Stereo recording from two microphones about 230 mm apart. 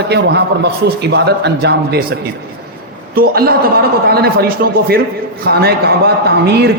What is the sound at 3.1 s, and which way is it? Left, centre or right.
A man's voice, right.